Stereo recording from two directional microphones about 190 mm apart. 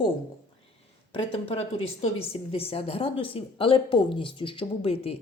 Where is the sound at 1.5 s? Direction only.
30° left (ahead or behind).